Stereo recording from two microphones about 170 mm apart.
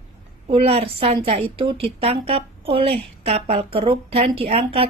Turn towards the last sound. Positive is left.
turn(degrees=-35)  # may be behind; listen again after turning